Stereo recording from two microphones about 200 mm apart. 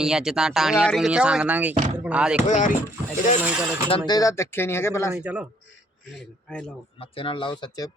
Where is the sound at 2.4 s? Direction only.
40° left (ahead or behind).